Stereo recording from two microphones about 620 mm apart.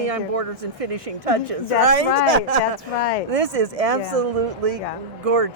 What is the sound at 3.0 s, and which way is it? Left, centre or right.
Speech, left.